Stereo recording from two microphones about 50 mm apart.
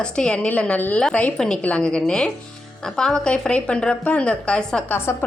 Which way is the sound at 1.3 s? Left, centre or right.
Centre.